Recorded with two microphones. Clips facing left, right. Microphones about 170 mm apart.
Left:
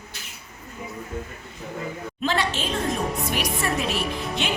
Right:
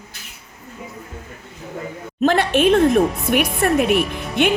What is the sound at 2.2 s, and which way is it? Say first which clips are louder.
Speech: right 10 dB; 55° right (ahead or behind).